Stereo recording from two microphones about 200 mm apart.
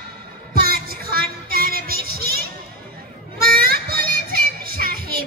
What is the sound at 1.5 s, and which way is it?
Music, 50° right (ahead or behind).